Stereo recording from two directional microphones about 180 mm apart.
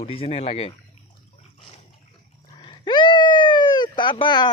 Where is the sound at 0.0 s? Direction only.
30° left (ahead or behind).